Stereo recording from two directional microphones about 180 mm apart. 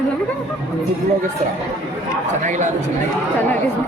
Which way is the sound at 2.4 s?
45° right (ahead or behind).